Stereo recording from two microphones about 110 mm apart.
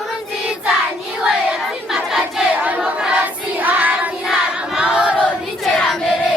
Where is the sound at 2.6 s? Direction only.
10° right (ahead or behind).